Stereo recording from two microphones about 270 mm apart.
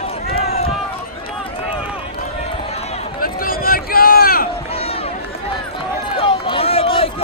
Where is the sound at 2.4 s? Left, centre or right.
Left.